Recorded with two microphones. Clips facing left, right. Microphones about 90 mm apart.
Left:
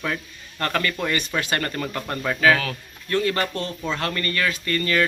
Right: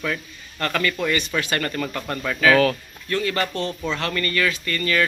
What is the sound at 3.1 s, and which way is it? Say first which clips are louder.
Speech: left 1 dB; 35° left (ahead or behind).